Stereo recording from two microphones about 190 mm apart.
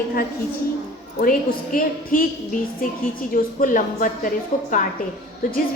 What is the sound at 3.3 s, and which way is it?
A woman's voice, 45° left (ahead or behind).